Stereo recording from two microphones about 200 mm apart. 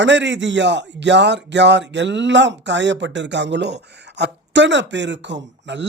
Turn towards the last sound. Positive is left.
turn(degrees=-60)  # may be behind; listen again after turning